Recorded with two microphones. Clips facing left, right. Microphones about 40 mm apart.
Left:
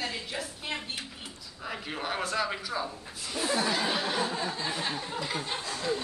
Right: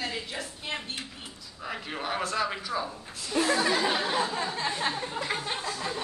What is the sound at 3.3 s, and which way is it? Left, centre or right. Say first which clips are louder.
Speech: right 4 dB; right.